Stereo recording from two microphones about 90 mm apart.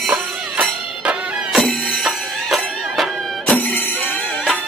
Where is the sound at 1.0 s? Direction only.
10° right (ahead or behind).